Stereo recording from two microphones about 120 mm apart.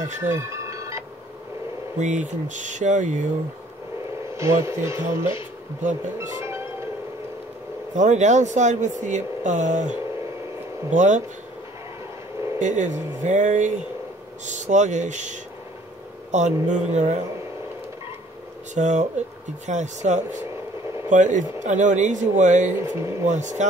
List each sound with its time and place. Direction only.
0.3 s music: 25° right (ahead or behind)
2.0 s speech: 85° right
4.4 s speech: 25° right (ahead or behind)
7.9 s speech: 80° right
12.5 s speech: 90° right
14.4 s speech: 80° right
16.3 s speech: 75° right (ahead or behind)
18.8 s speech: 85° right
22.8 s speech: 20° right (ahead or behind)
23.2 s speech: 80° right